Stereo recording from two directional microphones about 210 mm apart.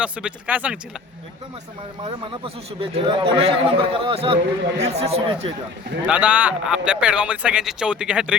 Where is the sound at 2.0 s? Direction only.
25° right (ahead or behind).